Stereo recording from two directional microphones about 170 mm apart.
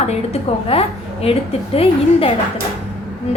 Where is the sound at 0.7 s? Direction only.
35° left (ahead or behind).